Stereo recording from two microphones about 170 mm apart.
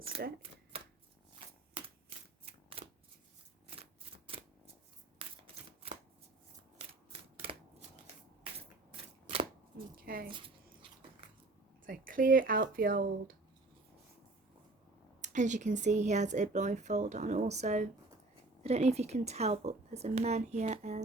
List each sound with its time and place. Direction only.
0.2 s speech: 70° right (ahead or behind)
0.7 s shuffling cards: 35° right (ahead or behind)
7.1 s shuffling cards: 35° right (ahead or behind)
9.7 s a sound: 60° right (ahead or behind)
10.2 s speech: 30° right (ahead or behind)
11.9 s speech: 55° right (ahead or behind)
15.2 s a woman's voice: 45° right (ahead or behind)